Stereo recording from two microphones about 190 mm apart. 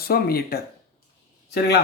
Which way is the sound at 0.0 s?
55° left (ahead or behind).